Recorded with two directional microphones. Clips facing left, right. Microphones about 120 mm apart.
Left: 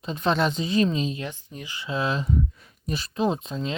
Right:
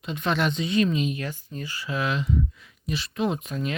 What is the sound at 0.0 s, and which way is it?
Speech, 35° left (ahead or behind).